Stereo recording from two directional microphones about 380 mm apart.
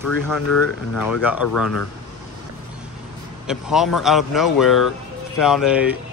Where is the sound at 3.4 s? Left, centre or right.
Centre.